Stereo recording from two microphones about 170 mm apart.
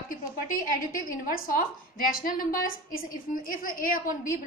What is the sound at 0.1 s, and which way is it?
A woman's voice, 50° left (ahead or behind).